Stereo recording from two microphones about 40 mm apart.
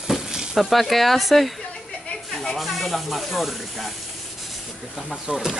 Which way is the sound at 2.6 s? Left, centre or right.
Centre.